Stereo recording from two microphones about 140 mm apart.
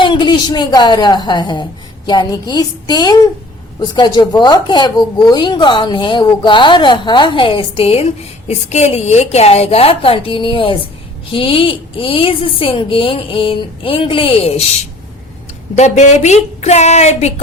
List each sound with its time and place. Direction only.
0.0 s a woman's voice: 35° left (ahead or behind)
15.7 s a woman's voice: 55° left (ahead or behind)